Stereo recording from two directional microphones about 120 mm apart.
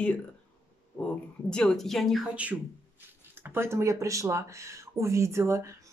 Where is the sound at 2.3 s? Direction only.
10° right (ahead or behind).